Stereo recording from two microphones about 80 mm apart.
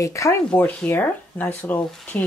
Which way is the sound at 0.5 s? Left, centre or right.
Centre.